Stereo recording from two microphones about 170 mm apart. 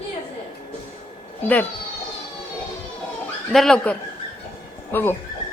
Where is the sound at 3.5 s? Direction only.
5° left (ahead or behind).